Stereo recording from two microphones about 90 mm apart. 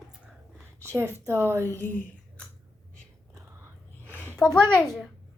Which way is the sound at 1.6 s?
25° left (ahead or behind).